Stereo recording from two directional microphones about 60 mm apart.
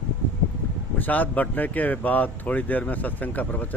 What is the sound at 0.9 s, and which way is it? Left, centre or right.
Speech, left.